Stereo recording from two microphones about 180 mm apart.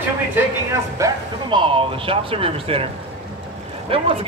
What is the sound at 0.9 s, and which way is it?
Speech, 20° right (ahead or behind).